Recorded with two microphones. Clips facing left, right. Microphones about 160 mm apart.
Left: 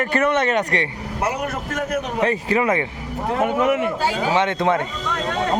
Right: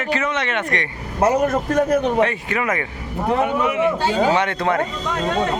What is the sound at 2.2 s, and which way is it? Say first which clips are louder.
Speech: left 2 dB; 30° left (ahead or behind).